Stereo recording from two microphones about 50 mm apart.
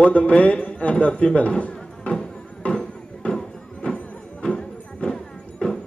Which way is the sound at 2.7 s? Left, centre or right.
Left.